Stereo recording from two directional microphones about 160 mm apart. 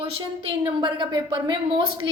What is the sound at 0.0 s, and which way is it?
A woman's voice, 35° right (ahead or behind).